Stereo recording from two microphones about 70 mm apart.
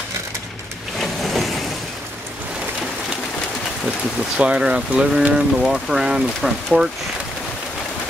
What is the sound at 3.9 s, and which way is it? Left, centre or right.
Speech, centre.